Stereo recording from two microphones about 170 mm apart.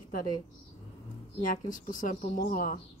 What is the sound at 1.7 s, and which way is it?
Speech, 50° left (ahead or behind).